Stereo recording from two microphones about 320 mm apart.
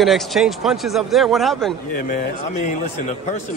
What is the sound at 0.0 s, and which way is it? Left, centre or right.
A man's voice, centre.